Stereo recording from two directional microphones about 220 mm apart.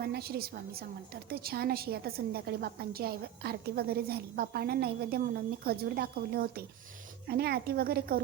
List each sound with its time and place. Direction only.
0.0 s a woman's voice: 45° right (ahead or behind)